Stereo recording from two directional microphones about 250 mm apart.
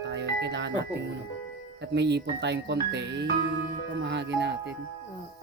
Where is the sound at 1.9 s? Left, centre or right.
Right.